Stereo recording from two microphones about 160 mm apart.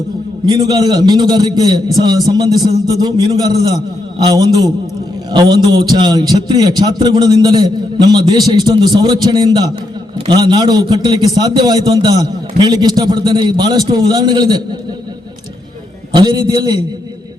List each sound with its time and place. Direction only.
0.4 s a man's voice: 25° right (ahead or behind)
16.1 s a man's voice: 25° right (ahead or behind)